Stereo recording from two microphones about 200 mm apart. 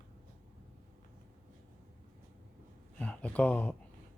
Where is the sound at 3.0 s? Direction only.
5° left (ahead or behind).